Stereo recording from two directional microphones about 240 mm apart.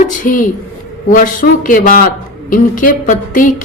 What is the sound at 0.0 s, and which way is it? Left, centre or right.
A woman's voice, left.